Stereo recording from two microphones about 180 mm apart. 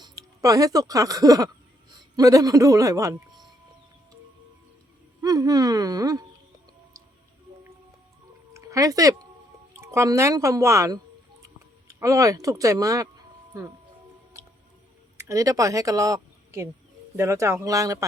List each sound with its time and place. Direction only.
0.0 s a man's voice: 20° right (ahead or behind)
5.2 s speech: 20° right (ahead or behind)
8.5 s speech: 20° right (ahead or behind)
14.3 s music: 15° right (ahead or behind)
15.2 s a woman's voice: 20° right (ahead or behind)